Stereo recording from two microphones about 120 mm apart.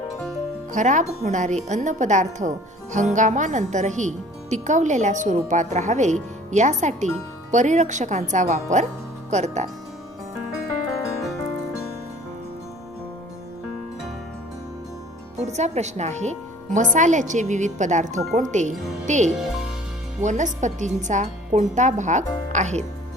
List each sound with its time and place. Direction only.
0.7 s a woman's voice: 90° right
9.3 s speech: 70° right (ahead or behind)
15.4 s a woman's voice: 70° right (ahead or behind)